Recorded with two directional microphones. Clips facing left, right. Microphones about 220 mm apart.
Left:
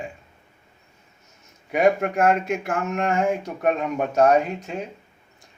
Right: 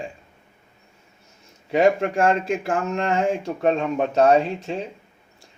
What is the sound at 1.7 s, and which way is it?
Speech, 30° right (ahead or behind).